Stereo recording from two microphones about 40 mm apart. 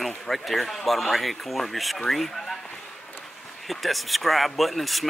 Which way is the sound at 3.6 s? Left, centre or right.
Centre.